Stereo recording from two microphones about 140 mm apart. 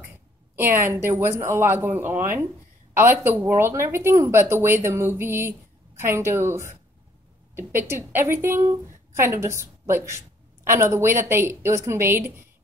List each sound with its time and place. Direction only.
0.6 s a woman's voice: 15° right (ahead or behind)
7.9 s a woman's voice: 15° right (ahead or behind)